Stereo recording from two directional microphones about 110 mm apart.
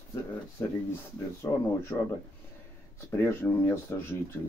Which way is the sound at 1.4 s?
30° left (ahead or behind).